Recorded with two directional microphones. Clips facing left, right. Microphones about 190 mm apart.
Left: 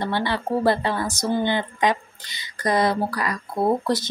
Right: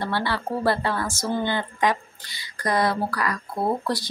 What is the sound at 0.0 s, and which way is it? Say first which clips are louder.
A woman's voice: left 2 dB; 20° left (ahead or behind).